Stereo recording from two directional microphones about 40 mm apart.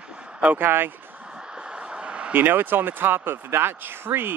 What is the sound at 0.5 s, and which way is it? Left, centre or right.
Speech, right.